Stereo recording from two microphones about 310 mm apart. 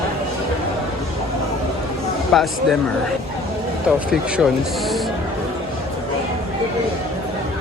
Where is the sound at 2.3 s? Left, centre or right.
Centre.